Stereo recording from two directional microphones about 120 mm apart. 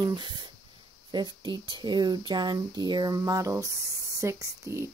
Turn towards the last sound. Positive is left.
turn(degrees=-25)  # may be behind; listen again after turning